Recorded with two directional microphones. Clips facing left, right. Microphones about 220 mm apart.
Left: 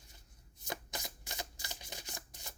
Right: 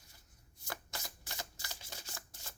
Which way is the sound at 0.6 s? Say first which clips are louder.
Left 3 dB; 20° left (ahead or behind).